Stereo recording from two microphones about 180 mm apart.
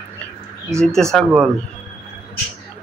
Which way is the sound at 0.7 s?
5° left (ahead or behind).